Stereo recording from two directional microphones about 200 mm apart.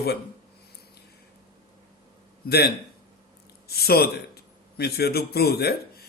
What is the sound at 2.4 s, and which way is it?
Speech, 55° left (ahead or behind).